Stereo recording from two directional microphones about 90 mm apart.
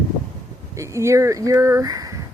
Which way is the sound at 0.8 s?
35° right (ahead or behind).